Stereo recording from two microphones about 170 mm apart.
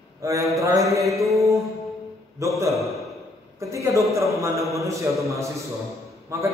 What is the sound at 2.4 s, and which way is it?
Speech, 15° right (ahead or behind).